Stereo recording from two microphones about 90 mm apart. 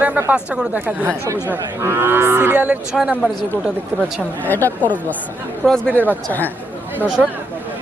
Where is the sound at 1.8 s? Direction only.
25° right (ahead or behind).